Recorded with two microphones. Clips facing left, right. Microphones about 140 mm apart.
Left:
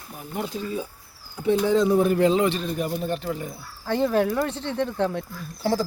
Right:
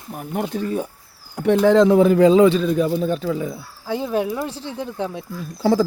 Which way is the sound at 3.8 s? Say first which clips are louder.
Left 1 dB; 10° right (ahead or behind).